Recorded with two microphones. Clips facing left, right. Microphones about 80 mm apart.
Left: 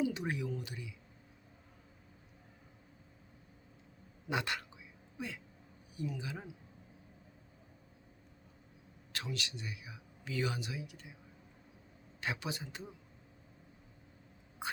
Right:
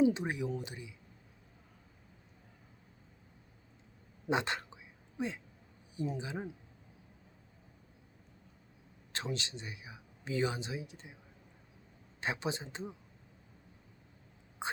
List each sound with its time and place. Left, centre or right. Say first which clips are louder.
0.0 s speech: right 6 dB; right
4.3 s a sound: right 4 dB; right
6.0 s speech: right 4 dB; right
9.1 s speech: right 3 dB; right
12.2 s speech: right 3 dB; right
14.6 s duck: right 2 dB; right